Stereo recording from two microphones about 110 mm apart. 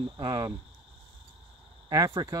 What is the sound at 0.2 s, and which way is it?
Speech, 40° right (ahead or behind).